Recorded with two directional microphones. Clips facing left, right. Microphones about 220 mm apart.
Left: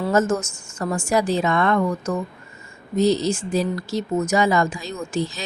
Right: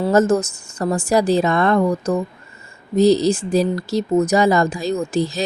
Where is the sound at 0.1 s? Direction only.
35° right (ahead or behind).